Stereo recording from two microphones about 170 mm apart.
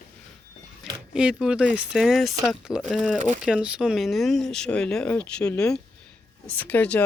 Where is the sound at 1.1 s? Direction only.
5° right (ahead or behind).